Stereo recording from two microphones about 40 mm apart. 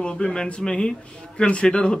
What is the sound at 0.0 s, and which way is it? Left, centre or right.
Speech, left.